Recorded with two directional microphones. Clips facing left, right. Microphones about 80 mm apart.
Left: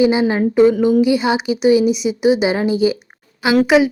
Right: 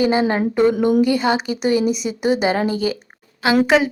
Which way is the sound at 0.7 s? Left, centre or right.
Right.